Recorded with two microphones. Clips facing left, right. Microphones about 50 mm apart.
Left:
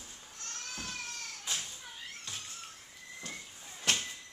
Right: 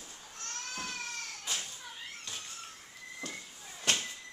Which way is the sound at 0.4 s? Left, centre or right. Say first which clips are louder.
Right 3 dB; right.